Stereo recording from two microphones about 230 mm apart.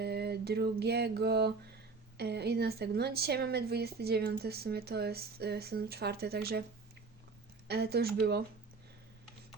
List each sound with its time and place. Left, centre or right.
0.0 s mantra: right
2.1 s speech: right
7.7 s speech: right